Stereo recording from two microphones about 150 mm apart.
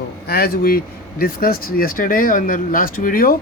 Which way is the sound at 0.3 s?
90° left.